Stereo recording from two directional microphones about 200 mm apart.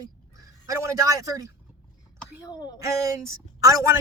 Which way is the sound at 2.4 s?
20° left (ahead or behind).